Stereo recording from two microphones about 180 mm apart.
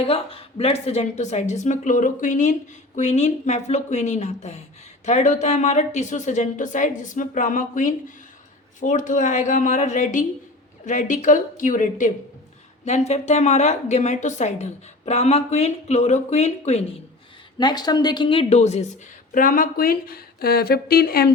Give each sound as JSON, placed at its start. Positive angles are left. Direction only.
{"t": 0.0, "sound": "a woman's voice", "side_deg": 30}
{"t": 17.6, "sound": "a woman's voice", "side_deg": 25}